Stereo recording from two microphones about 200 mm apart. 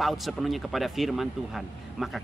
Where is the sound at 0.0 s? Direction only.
Centre (ahead or behind).